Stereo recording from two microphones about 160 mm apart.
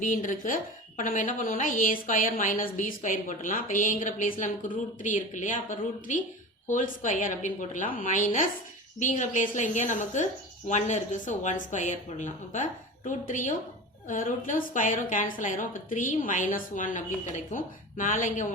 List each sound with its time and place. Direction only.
0.0 s a woman's voice: 55° left (ahead or behind)